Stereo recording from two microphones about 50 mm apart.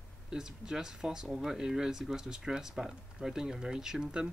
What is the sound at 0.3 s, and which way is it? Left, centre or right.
Speech, centre.